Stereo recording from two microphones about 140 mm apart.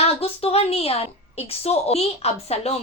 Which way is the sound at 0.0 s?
45° left (ahead or behind).